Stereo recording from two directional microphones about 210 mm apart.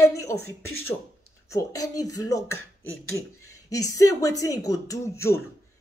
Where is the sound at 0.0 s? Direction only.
15° left (ahead or behind).